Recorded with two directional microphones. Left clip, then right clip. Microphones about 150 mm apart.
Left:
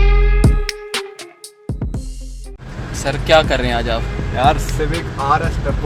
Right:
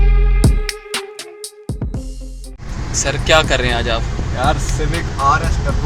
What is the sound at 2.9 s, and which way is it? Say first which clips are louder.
Speech: left 1 dB; 15° left (ahead or behind).